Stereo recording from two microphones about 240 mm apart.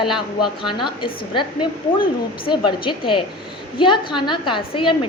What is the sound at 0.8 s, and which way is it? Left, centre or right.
Speech, centre.